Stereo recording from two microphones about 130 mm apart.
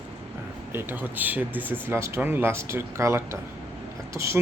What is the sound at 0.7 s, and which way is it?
Speech, 15° right (ahead or behind).